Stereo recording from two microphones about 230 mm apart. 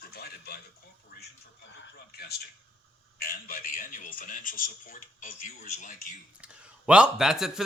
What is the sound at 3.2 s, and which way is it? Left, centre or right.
A man's voice, left.